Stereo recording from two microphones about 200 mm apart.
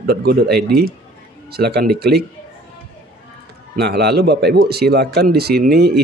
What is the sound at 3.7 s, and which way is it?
Speech, 55° right (ahead or behind).